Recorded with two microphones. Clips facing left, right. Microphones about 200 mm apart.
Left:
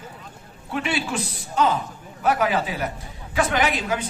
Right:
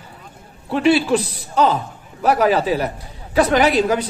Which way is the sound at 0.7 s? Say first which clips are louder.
Right 10 dB; 35° right (ahead or behind).